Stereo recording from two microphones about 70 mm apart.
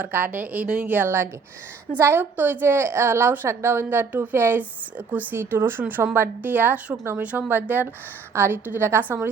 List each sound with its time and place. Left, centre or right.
0.0 s a woman's voice: right
7.2 s a woman's voice: right